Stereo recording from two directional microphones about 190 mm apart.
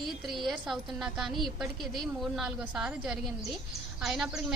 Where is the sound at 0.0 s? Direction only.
Centre (ahead or behind).